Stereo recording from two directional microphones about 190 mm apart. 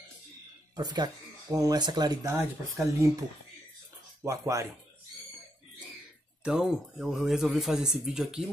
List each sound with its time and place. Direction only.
0.7 s speech: 20° right (ahead or behind)
4.2 s speech: 15° right (ahead or behind)
6.4 s speech: 5° right (ahead or behind)